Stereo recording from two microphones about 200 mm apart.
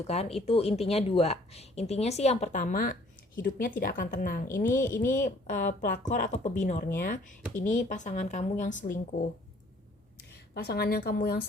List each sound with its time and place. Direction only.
0.1 s a woman's voice: 30° left (ahead or behind)
10.2 s a woman's voice: 55° left (ahead or behind)